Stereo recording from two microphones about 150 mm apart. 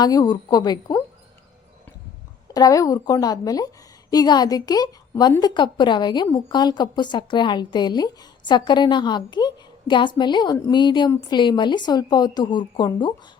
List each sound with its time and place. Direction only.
0.0 s a woman's voice: 25° left (ahead or behind)
2.5 s a woman's voice: 25° left (ahead or behind)